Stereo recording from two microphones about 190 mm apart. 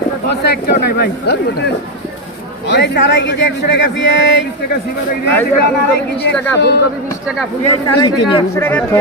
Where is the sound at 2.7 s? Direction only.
65° left (ahead or behind).